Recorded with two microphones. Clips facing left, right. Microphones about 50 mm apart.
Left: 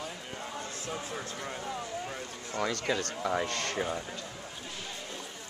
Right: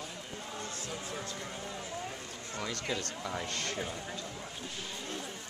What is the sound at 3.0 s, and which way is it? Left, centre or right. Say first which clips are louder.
Speech: left 6 dB; left.